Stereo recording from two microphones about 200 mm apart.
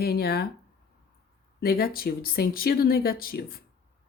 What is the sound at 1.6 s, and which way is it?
Speech, 50° left (ahead or behind).